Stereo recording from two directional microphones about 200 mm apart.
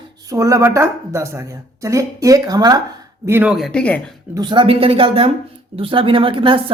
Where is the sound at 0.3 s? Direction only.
15° right (ahead or behind).